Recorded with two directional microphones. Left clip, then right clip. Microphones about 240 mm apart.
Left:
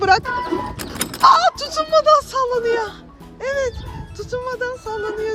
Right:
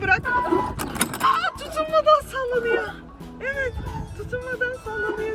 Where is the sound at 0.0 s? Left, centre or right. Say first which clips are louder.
Left 6 dB; centre.